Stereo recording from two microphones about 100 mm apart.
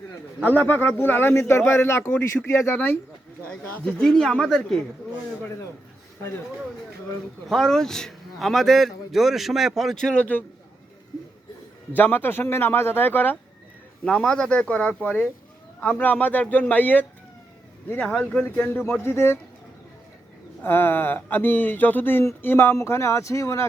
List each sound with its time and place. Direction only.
0.5 s speech: 20° left (ahead or behind)
3.5 s a man's voice: 10° left (ahead or behind)
7.4 s a man's voice: 5° left (ahead or behind)
11.9 s speech: 20° left (ahead or behind)
14.0 s speech: 10° left (ahead or behind)
18.0 s a man's voice: 5° left (ahead or behind)
18.3 s speech: 15° left (ahead or behind)
20.6 s speech: 20° left (ahead or behind)